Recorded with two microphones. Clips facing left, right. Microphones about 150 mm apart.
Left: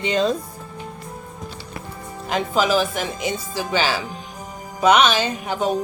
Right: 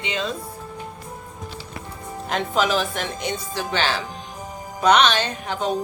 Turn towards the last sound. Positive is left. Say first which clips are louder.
# left 2 dB
turn(degrees=10)  # may be behind; listen again after turning